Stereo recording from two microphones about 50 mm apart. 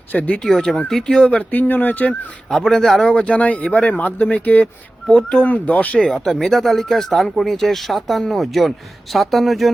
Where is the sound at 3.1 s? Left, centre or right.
Left.